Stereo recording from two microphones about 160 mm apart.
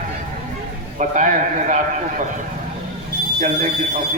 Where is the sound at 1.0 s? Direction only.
55° right (ahead or behind).